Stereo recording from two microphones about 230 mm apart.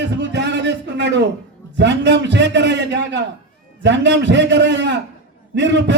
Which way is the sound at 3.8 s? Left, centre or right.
Right.